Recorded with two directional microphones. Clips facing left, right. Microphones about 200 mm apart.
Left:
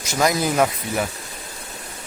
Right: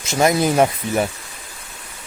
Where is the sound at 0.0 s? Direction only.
25° right (ahead or behind).